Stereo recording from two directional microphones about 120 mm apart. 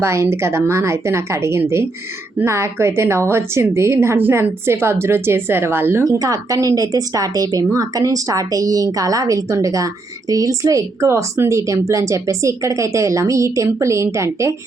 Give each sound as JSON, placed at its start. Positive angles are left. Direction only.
{"t": 0.0, "sound": "a woman's voice", "side_deg": -25}
{"t": 6.1, "sound": "a woman's voice", "side_deg": -30}